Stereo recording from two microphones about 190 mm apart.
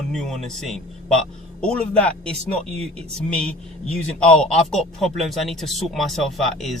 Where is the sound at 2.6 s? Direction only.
30° right (ahead or behind).